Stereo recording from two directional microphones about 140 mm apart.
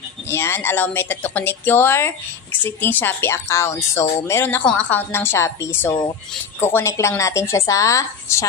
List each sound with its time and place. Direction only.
0.3 s speech: 20° left (ahead or behind)